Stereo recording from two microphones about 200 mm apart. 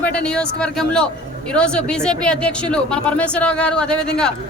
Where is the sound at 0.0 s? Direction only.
5° left (ahead or behind).